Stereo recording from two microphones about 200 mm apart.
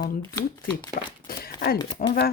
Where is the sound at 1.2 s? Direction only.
50° left (ahead or behind).